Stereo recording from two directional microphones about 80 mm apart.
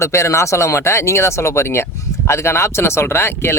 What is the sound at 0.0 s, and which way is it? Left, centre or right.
Speech, left.